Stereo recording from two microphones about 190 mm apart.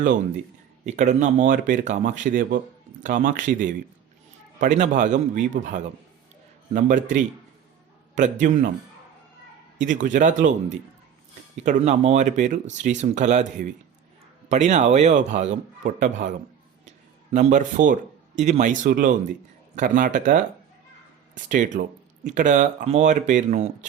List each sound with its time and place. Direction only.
0.9 s speech: 40° right (ahead or behind)
9.7 s speech: 40° right (ahead or behind)
17.3 s speech: 40° right (ahead or behind)
21.5 s speech: 40° right (ahead or behind)